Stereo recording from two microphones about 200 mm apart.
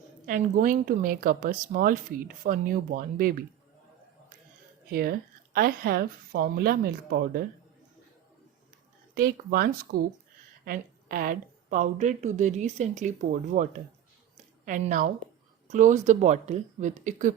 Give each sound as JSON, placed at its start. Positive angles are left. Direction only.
{"t": 0.3, "sound": "a woman's voice", "side_deg": -40}
{"t": 4.9, "sound": "a woman's voice", "side_deg": -50}
{"t": 9.1, "sound": "a woman's voice", "side_deg": -45}